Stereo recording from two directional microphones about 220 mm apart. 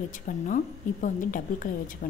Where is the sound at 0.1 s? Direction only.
35° left (ahead or behind).